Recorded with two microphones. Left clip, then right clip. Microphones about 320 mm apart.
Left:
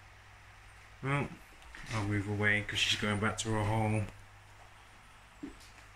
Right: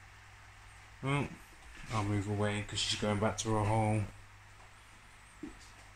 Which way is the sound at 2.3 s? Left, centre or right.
Centre.